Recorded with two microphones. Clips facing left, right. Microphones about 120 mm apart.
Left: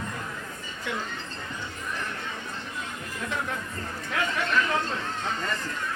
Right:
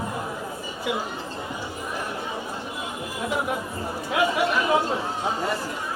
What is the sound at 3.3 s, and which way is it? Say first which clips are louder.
Speech: right 6 dB; 15° right (ahead or behind).